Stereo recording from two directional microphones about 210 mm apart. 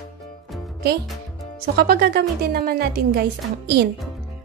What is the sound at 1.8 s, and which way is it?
A woman's voice, 45° right (ahead or behind).